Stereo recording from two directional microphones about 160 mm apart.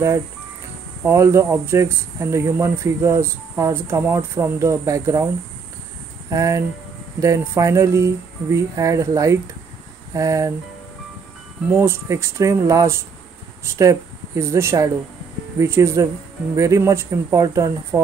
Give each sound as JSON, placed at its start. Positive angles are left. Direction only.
{"t": 1.0, "sound": "speech", "side_deg": -15}
{"t": 6.3, "sound": "speech", "side_deg": -20}
{"t": 11.7, "sound": "speech", "side_deg": -15}